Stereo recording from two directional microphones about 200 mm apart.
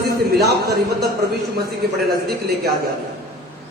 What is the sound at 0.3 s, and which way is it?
Speech, 55° right (ahead or behind).